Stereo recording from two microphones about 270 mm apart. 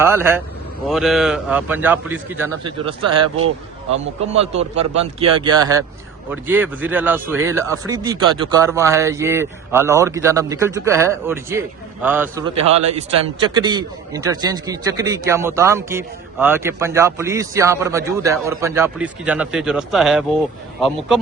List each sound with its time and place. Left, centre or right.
0.0 s a man's voice: centre; by 4.8 s right
4.8 s speech: right
5.3 s speech: centre
13.5 s speech: centre